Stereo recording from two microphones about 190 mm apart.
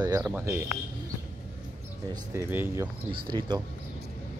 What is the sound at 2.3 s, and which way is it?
Speech, 10° right (ahead or behind).